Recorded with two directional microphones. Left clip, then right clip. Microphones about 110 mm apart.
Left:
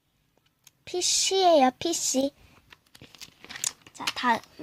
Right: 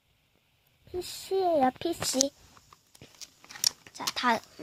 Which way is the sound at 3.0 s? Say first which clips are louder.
Left 3 dB; 10° right (ahead or behind).